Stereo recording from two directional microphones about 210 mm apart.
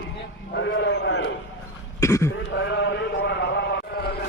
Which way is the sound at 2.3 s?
60° left (ahead or behind).